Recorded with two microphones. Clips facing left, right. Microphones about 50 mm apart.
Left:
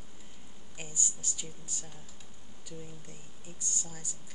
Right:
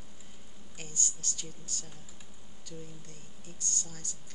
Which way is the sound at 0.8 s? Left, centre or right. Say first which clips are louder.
Even; centre.